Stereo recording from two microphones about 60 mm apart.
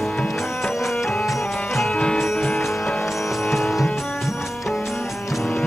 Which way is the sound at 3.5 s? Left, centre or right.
Centre.